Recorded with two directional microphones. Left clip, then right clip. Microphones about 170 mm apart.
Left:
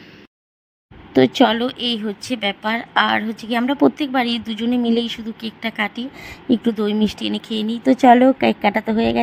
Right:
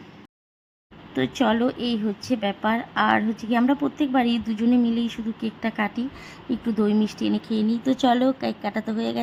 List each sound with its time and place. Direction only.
1.1 s a woman's voice: 25° left (ahead or behind)